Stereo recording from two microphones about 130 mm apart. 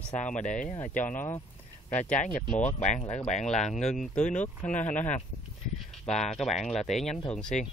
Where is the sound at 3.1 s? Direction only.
65° left (ahead or behind).